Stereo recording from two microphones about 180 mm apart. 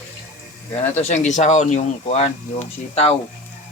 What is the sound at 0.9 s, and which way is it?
Speech, 40° left (ahead or behind).